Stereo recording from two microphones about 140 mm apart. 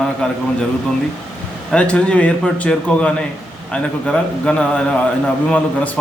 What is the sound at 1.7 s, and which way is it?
A man's voice, 10° left (ahead or behind).